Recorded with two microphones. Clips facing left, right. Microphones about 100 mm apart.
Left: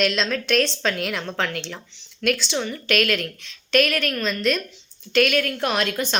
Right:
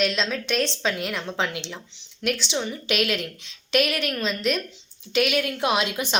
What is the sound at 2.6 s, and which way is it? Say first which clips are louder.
A woman's voice: left 2 dB; 15° right (ahead or behind).